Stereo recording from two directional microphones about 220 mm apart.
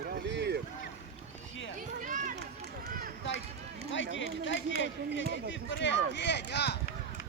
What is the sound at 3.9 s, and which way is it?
Run, 60° left (ahead or behind).